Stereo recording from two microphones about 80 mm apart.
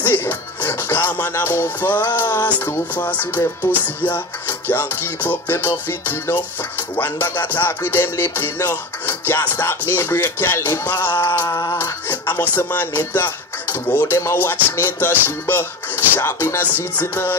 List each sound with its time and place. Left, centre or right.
0.0 s music: left
11.4 s a sound: left
11.8 s music: left